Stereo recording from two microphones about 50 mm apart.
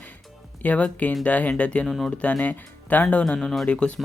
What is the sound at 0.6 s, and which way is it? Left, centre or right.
Speech, left.